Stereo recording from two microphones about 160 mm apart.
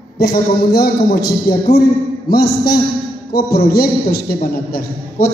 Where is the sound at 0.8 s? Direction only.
70° left (ahead or behind).